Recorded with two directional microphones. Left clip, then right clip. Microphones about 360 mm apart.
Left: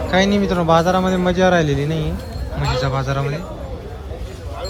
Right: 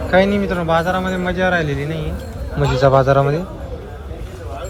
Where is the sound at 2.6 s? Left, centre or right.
Centre.